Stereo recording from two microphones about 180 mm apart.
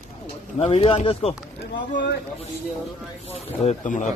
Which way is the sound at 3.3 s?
40° left (ahead or behind).